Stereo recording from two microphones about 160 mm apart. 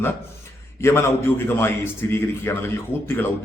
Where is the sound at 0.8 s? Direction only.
15° left (ahead or behind).